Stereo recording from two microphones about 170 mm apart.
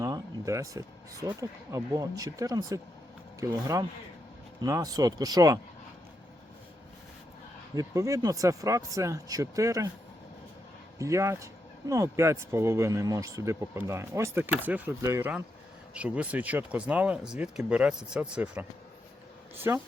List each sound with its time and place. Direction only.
0.0 s speech: 20° right (ahead or behind)
7.8 s speech: 20° right (ahead or behind)
10.9 s speech: 20° right (ahead or behind)